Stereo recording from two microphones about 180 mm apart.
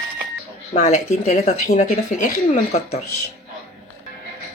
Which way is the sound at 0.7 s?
40° left (ahead or behind).